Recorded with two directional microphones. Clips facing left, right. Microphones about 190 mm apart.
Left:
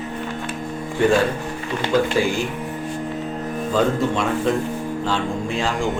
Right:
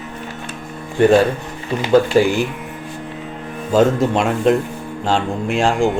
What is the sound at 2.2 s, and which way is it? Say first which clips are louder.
Speech: right 6 dB; 60° right (ahead or behind).